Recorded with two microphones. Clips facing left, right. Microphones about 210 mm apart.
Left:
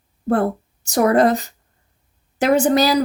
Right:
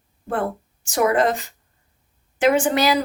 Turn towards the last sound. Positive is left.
turn(degrees=40)  # may be behind; listen again after turning